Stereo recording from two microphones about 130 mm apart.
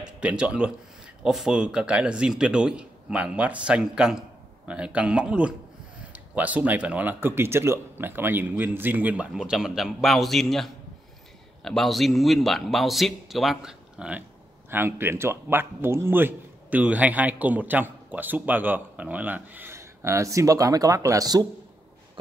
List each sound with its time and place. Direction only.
0.2 s a man's voice: 10° right (ahead or behind); by 21.5 s 30° right (ahead or behind)